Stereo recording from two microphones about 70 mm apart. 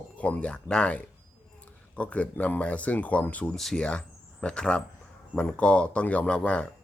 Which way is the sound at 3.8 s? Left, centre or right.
Centre.